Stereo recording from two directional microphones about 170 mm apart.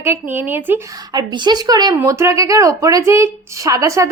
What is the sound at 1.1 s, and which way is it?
Child singing, 25° right (ahead or behind).